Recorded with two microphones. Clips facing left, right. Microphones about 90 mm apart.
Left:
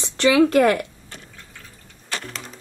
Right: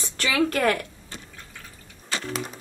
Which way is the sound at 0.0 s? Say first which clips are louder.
Left 8 dB; 20° left (ahead or behind).